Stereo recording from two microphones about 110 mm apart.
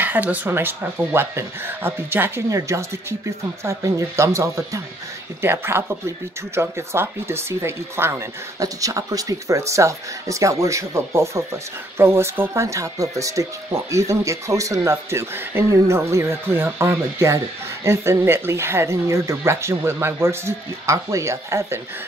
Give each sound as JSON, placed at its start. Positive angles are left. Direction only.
{"t": 0.0, "sound": "speech", "side_deg": -15}